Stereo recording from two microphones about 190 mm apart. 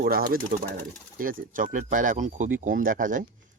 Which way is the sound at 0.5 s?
40° right (ahead or behind).